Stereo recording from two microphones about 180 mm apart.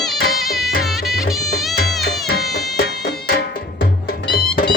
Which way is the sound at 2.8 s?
65° left (ahead or behind).